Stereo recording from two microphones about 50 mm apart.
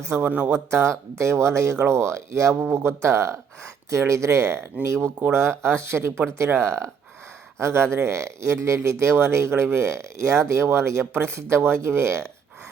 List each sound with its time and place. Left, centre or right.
0.3 s speech: right
0.5 s speech: right
2.7 s speech: right
3.8 s speech: right
5.3 s speech: right